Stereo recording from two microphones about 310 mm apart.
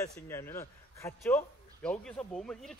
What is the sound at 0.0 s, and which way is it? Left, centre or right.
A man's voice, centre.